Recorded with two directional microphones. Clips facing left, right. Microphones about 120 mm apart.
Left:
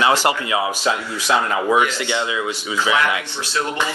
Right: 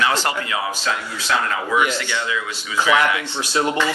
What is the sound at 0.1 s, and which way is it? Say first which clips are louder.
Speech: left 4 dB; 15° left (ahead or behind).